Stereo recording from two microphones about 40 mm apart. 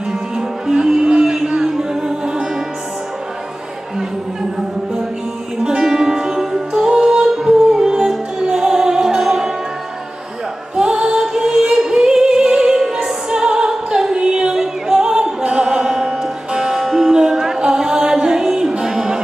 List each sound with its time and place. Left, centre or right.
0.4 s music: centre
5.6 s music: centre
10.8 s music: centre